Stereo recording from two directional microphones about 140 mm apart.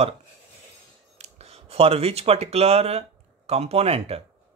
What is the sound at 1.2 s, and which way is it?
Speech, 45° right (ahead or behind).